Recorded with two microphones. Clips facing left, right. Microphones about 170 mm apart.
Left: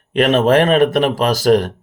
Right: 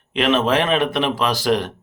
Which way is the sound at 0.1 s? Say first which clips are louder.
Left 5 dB; 45° left (ahead or behind).